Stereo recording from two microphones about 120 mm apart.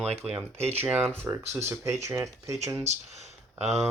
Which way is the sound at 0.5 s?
60° right (ahead or behind).